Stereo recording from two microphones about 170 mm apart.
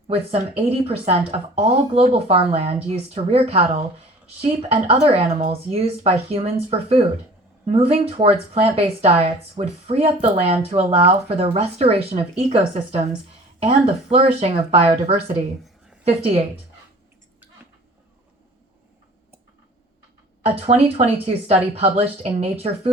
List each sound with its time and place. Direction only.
0.1 s speech: 35° right (ahead or behind)
20.4 s speech: 40° right (ahead or behind)